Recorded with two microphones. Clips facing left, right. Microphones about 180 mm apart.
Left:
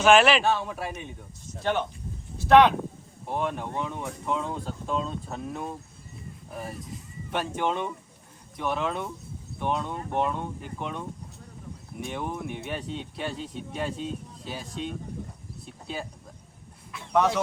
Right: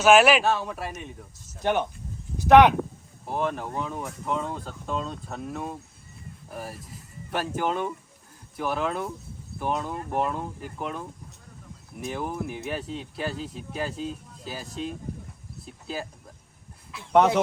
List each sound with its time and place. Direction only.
0.0 s speech: 10° right (ahead or behind)
2.4 s speech: 15° right (ahead or behind)
3.2 s speech: centre (ahead or behind)
15.6 s a sound: centre (ahead or behind)